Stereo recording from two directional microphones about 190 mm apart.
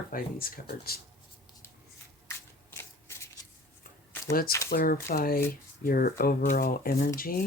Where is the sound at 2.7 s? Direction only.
15° left (ahead or behind).